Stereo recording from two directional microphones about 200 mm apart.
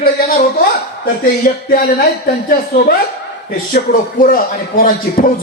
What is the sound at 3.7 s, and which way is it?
Speech, 45° left (ahead or behind).